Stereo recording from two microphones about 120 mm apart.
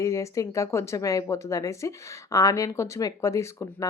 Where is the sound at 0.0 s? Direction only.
25° left (ahead or behind).